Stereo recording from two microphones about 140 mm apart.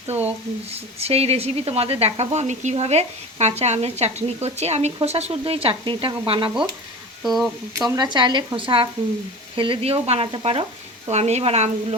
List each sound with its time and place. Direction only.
0.7 s speech: 45° right (ahead or behind)
7.2 s speech: centre (ahead or behind)
7.8 s speech: 25° right (ahead or behind)
9.6 s frying: 40° right (ahead or behind)
11.1 s speech: 50° right (ahead or behind)